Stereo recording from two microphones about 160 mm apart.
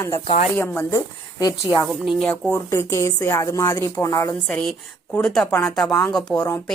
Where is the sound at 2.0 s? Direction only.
5° left (ahead or behind).